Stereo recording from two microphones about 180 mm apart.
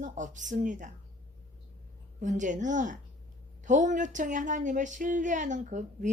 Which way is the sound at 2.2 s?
45° right (ahead or behind).